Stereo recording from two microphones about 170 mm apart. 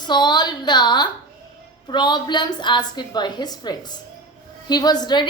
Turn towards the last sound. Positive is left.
turn(degrees=25)  # may be behind; listen again after turning